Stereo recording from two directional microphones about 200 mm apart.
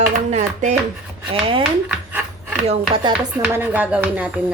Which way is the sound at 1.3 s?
25° right (ahead or behind).